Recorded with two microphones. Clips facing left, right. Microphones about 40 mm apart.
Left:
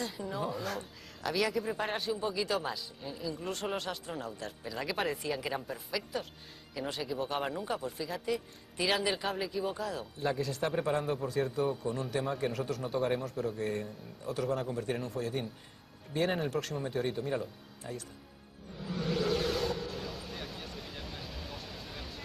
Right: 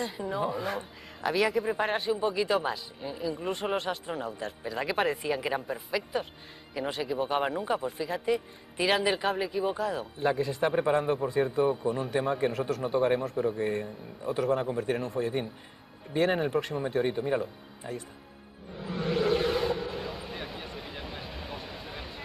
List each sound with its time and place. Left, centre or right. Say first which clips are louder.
0.0 s a man's voice: right 5 dB; centre
9.4 s a man's voice: right 5 dB; right
14.9 s speech: right 5 dB; centre
15.1 s a man's voice: right 5 dB; right
18.8 s vehicle: right 4 dB; centre